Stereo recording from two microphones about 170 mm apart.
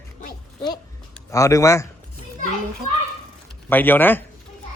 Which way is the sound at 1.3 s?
20° left (ahead or behind).